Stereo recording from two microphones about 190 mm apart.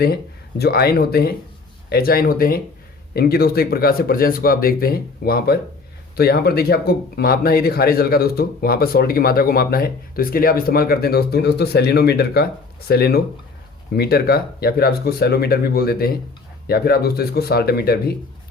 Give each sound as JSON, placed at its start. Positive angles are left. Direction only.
{"t": 0.6, "sound": "speech", "side_deg": 55}